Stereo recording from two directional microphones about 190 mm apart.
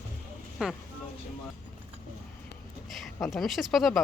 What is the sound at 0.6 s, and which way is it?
Speech, 5° right (ahead or behind).